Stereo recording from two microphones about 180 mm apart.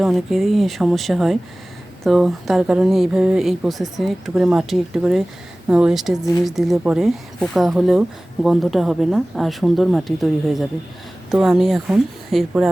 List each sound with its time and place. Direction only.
0.0 s speech: centre (ahead or behind)